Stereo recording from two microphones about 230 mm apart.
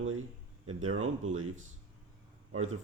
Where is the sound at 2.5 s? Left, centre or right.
Right.